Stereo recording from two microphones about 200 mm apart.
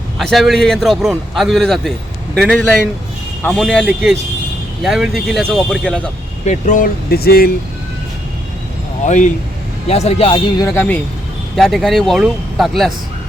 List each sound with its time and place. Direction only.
0.2 s a man's voice: centre (ahead or behind)
6.4 s speech: 40° left (ahead or behind)
9.0 s a man's voice: 35° left (ahead or behind); by 12.9 s centre (ahead or behind)